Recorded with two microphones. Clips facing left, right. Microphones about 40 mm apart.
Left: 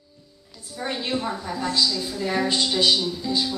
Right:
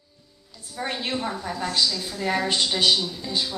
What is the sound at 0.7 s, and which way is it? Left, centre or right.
Speech, centre.